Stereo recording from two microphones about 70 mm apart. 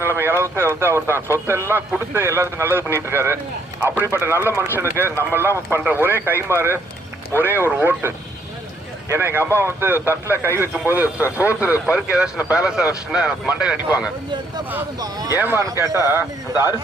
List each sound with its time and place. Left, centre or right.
0.0 s a man's voice: right
14.9 s speech: right
15.4 s a man's voice: right
15.6 s speech: right
16.0 s a man's voice: right